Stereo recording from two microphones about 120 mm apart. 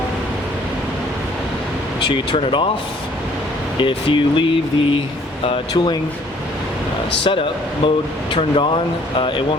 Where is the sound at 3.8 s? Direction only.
40° left (ahead or behind).